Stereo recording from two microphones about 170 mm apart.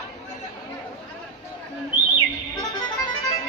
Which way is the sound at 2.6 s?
25° left (ahead or behind).